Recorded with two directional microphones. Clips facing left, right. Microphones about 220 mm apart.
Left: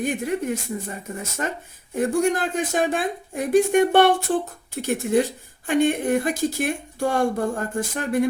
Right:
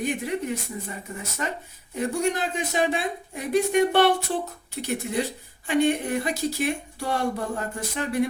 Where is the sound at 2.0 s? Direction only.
50° left (ahead or behind).